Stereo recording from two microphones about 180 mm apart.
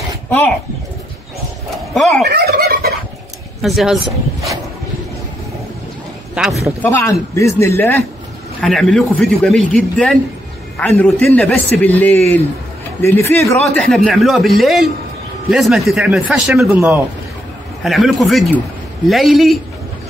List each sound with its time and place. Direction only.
2.0 s a man's voice: centre (ahead or behind)
2.2 s fowl: 65° right (ahead or behind)
3.6 s a man's voice: centre (ahead or behind)
6.3 s a man's voice: 5° right (ahead or behind)
6.8 s speech: 15° left (ahead or behind)
8.5 s a man's voice: 5° left (ahead or behind)
13.8 s a man's voice: centre (ahead or behind)
17.8 s a man's voice: centre (ahead or behind)